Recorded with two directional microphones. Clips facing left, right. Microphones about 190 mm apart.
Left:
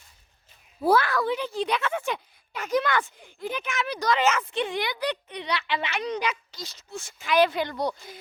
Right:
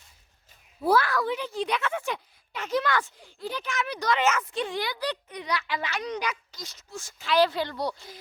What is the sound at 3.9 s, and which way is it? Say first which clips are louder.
A woman's voice: left 2 dB; 35° left (ahead or behind).